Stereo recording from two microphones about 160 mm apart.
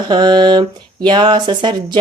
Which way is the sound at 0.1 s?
25° right (ahead or behind).